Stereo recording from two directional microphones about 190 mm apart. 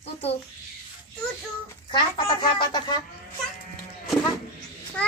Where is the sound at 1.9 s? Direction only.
25° left (ahead or behind).